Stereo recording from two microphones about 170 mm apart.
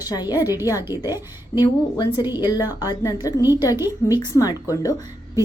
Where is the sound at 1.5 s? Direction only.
20° left (ahead or behind).